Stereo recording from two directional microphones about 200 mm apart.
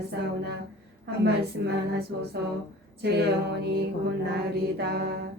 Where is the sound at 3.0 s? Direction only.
55° right (ahead or behind).